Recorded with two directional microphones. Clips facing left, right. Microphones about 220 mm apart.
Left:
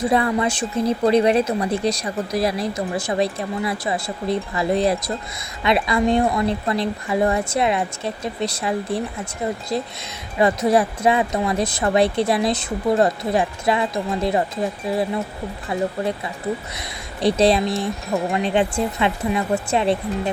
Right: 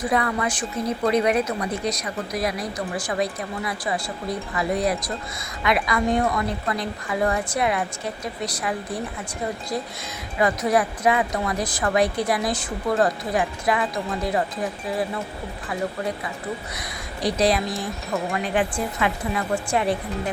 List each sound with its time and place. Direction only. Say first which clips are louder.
0.0 s a woman's voice: left 4 dB; 25° left (ahead or behind)
10.3 s a woman's voice: left 4 dB; 25° left (ahead or behind)
15.7 s a woman's voice: left 4 dB; 25° left (ahead or behind)
17.2 s a woman's voice: left 5 dB; 25° left (ahead or behind)